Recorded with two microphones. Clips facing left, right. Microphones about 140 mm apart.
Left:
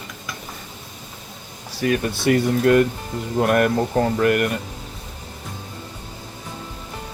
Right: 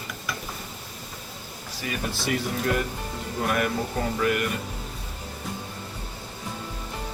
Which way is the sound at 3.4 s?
55° left (ahead or behind).